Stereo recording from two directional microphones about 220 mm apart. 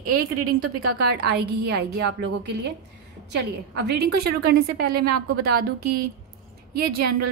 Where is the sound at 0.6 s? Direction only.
90° right.